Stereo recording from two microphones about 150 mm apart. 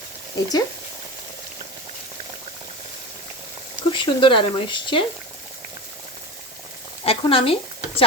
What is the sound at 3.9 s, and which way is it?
Speech, 35° left (ahead or behind).